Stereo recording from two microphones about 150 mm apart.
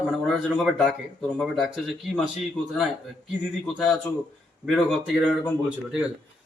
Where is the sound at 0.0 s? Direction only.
5° right (ahead or behind).